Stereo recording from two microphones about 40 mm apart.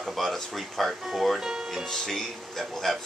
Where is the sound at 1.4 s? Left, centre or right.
Centre.